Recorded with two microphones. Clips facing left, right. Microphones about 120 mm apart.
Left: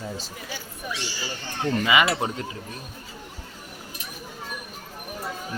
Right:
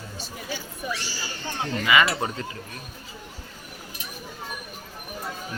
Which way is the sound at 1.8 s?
20° left (ahead or behind).